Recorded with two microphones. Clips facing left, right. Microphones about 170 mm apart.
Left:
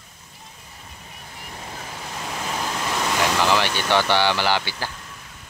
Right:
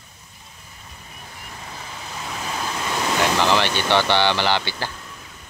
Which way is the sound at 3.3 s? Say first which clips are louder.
Right 1 dB; 10° left (ahead or behind).